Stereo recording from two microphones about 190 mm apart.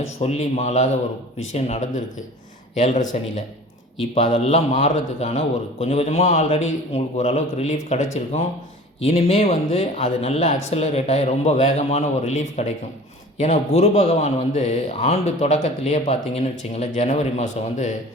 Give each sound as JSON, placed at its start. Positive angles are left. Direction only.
{"t": 0.2, "sound": "speech", "side_deg": 35}